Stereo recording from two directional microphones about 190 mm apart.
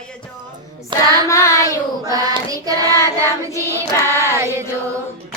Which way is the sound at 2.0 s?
20° right (ahead or behind).